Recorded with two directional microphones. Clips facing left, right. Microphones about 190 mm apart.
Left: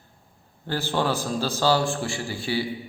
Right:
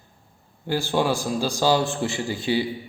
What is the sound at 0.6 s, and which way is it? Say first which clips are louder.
A man's voice: right 3 dB; 10° right (ahead or behind).